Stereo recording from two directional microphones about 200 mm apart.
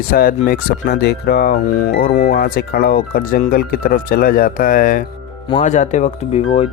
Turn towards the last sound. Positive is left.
turn(degrees=35)  # may be behind; listen again after turning